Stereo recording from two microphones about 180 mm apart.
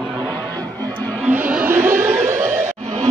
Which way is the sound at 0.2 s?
10° left (ahead or behind).